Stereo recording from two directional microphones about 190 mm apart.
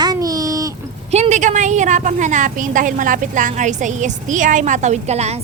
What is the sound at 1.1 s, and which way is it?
A woman's voice, 35° right (ahead or behind).